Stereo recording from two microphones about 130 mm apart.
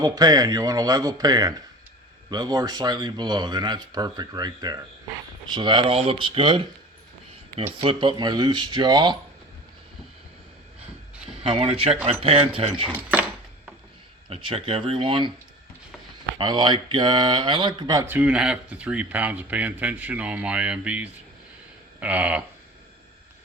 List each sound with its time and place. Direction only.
0.0 s a man's voice: 30° right (ahead or behind)
7.8 s speech: 40° right (ahead or behind)
11.4 s speech: 50° right (ahead or behind)
13.0 s speech: 10° right (ahead or behind)
14.3 s speech: 45° right (ahead or behind)
16.4 s speech: 35° right (ahead or behind)
18.0 s speech: 15° right (ahead or behind)